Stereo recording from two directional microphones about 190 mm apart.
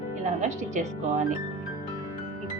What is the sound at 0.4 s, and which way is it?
Speech, 40° right (ahead or behind).